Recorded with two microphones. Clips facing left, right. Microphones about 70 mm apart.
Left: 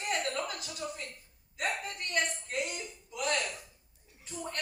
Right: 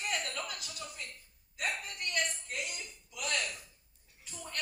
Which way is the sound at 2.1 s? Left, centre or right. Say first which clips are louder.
Left 2 dB; left.